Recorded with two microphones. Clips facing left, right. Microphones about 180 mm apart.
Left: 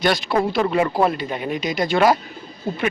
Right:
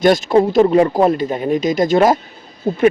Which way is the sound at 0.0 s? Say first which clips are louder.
Right 7 dB; 45° right (ahead or behind).